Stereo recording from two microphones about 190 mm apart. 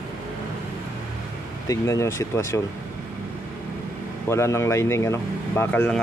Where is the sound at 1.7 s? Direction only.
15° left (ahead or behind).